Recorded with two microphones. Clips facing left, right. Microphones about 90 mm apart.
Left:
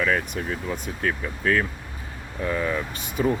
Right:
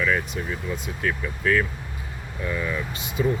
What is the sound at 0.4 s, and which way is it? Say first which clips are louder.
Speech: left 1 dB; 50° left (ahead or behind).